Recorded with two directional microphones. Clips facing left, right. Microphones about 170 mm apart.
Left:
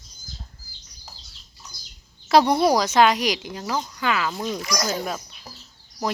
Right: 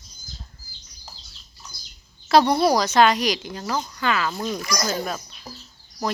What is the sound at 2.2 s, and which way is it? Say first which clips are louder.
Speech: even; 20° left (ahead or behind).